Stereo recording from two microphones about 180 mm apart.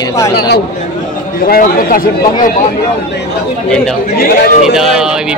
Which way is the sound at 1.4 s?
55° left (ahead or behind).